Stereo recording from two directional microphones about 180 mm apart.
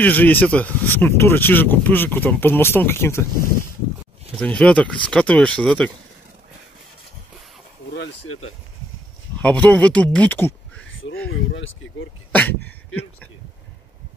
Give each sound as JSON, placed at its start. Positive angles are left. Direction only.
{"t": 0.0, "sound": "speech", "side_deg": 10}
{"t": 4.4, "sound": "speech", "side_deg": 5}
{"t": 9.4, "sound": "speech", "side_deg": 10}
{"t": 11.2, "sound": "speech", "side_deg": 90}
{"t": 12.3, "sound": "speech", "side_deg": 10}